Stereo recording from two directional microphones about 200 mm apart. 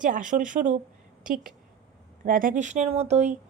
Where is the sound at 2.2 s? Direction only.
45° right (ahead or behind).